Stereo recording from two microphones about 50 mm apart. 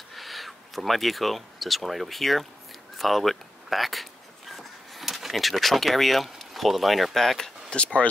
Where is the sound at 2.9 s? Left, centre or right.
Centre.